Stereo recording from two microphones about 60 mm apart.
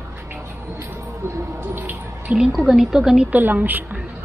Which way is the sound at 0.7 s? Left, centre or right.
Right.